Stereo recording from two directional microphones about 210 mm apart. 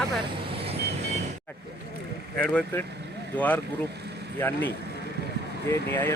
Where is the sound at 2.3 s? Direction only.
5° left (ahead or behind).